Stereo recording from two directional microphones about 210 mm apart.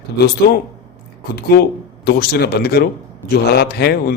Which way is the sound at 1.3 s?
50° left (ahead or behind).